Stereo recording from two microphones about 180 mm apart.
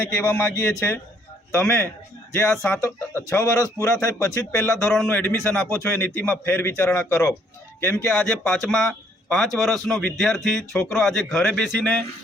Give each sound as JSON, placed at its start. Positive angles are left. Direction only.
{"t": 0.0, "sound": "speech", "side_deg": 10}
{"t": 2.8, "sound": "speech", "side_deg": 15}